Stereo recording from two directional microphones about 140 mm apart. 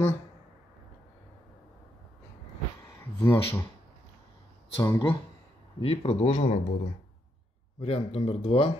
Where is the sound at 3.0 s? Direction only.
20° left (ahead or behind).